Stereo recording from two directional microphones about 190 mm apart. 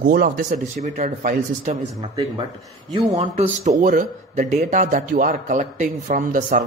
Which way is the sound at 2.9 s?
30° right (ahead or behind).